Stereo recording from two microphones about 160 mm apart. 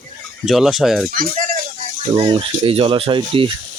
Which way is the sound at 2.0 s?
35° right (ahead or behind).